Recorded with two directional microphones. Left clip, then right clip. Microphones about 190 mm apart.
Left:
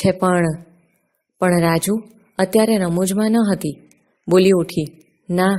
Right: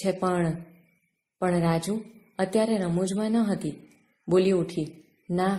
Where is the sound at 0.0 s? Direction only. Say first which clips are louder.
Left 9 dB; 45° left (ahead or behind).